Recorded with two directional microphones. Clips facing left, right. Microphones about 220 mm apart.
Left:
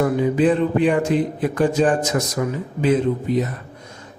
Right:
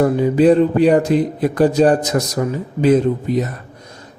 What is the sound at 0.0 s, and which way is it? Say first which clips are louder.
Speech: right 4 dB; 40° right (ahead or behind).